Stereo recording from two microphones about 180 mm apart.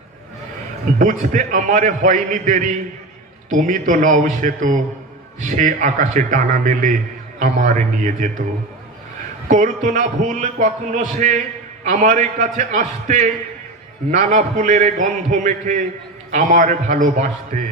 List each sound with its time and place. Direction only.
0.9 s a man's voice: 45° right (ahead or behind)
9.5 s a man's voice: 40° right (ahead or behind)